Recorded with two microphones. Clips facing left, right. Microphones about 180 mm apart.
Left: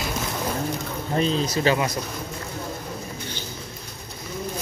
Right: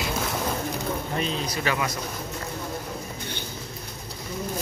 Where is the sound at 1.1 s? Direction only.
35° left (ahead or behind).